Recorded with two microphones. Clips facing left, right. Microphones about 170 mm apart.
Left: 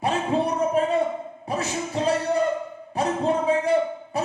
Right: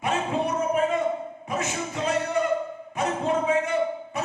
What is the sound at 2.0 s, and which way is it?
Music, 35° left (ahead or behind).